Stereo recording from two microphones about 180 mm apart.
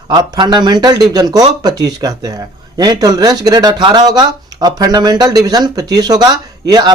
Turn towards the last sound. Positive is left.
turn(degrees=-20)  # may be behind; listen again after turning